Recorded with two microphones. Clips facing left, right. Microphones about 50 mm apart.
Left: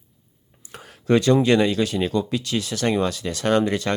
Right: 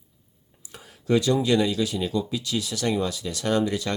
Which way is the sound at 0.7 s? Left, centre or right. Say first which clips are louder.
Left 4 dB; left.